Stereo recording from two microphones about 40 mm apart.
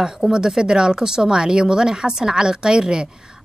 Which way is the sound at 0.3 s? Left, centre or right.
Centre.